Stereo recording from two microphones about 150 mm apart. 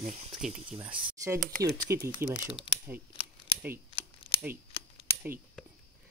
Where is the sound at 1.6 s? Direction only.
20° right (ahead or behind).